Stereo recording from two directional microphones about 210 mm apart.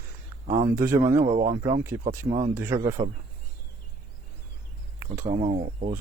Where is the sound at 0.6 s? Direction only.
10° right (ahead or behind).